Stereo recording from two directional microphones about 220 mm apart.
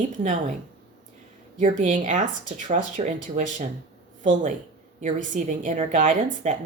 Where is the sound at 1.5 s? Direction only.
35° right (ahead or behind).